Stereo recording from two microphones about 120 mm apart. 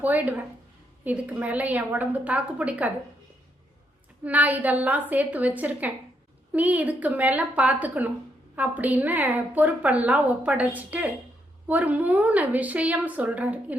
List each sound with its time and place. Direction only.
0.0 s a woman's voice: 15° right (ahead or behind)
4.2 s a woman's voice: 15° right (ahead or behind)